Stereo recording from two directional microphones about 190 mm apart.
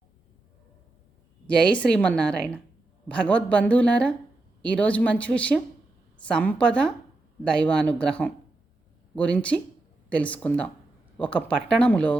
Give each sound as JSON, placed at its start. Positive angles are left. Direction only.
{"t": 1.5, "sound": "a woman's voice", "side_deg": 5}